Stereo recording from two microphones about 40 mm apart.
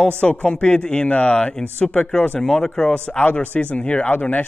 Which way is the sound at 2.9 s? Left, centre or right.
Left.